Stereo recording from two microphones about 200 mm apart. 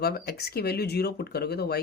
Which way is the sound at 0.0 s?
50° left (ahead or behind).